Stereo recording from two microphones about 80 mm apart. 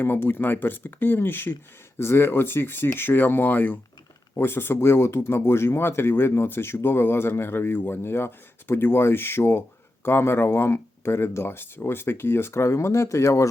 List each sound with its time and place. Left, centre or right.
0.0 s speech: left